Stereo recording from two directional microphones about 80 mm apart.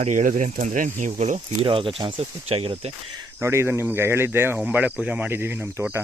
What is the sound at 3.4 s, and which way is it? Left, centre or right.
Speech, right.